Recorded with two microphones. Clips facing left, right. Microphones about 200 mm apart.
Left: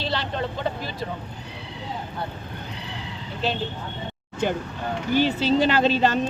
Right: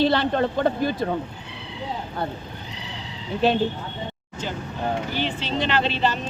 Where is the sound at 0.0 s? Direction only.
55° right (ahead or behind).